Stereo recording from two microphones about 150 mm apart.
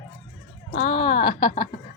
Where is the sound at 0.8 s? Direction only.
35° left (ahead or behind).